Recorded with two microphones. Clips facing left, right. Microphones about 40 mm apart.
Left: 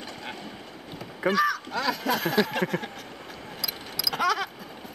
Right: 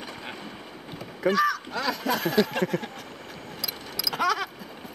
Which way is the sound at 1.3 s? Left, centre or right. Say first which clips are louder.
Even; centre.